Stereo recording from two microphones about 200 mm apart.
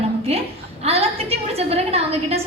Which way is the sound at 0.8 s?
30° right (ahead or behind).